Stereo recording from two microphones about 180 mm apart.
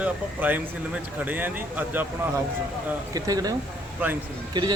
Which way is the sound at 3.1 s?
20° right (ahead or behind).